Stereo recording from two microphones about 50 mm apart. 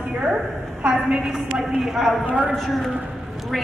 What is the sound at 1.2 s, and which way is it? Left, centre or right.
A woman's voice, centre.